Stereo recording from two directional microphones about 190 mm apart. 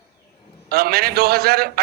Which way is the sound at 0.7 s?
55° right (ahead or behind).